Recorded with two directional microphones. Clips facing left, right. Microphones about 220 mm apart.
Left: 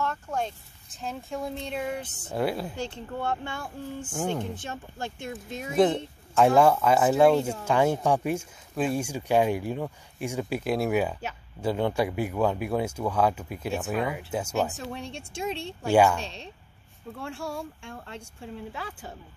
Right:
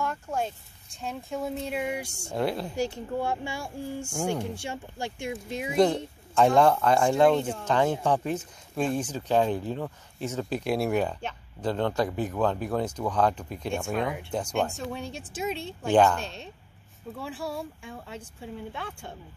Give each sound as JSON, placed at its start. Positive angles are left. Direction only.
{"t": 0.0, "sound": "a sound", "side_deg": -10}
{"t": 1.0, "sound": "speech", "side_deg": 0}
{"t": 2.3, "sound": "speech", "side_deg": 5}
{"t": 2.7, "sound": "speech", "side_deg": -10}
{"t": 5.9, "sound": "speech", "side_deg": 0}
{"t": 10.6, "sound": "speech", "side_deg": 0}